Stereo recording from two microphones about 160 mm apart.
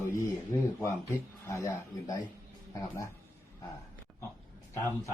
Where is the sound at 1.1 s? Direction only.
15° left (ahead or behind).